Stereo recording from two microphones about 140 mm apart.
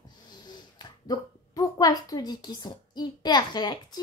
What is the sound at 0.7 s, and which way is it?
A woman's voice, 25° left (ahead or behind).